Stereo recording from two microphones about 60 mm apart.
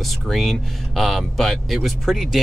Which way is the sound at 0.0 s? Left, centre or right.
Centre.